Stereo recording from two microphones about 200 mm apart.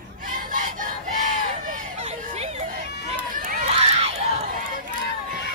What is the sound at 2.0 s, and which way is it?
Chatter, 35° right (ahead or behind).